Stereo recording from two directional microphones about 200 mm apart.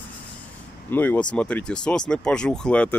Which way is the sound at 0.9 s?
10° left (ahead or behind).